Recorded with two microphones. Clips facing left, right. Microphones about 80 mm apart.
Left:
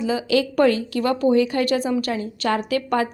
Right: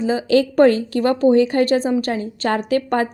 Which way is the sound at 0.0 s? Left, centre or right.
Right.